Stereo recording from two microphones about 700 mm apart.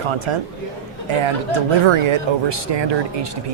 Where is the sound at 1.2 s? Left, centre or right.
Right.